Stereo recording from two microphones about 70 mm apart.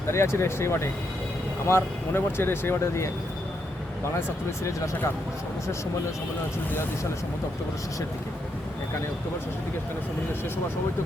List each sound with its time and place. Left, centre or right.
0.1 s speech: left